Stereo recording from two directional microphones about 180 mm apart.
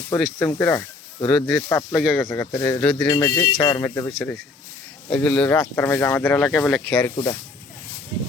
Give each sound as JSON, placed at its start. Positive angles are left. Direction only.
{"t": 0.2, "sound": "speech", "side_deg": 10}
{"t": 2.8, "sound": "speech", "side_deg": 5}
{"t": 3.1, "sound": "speech", "side_deg": 15}
{"t": 7.0, "sound": "speech", "side_deg": 25}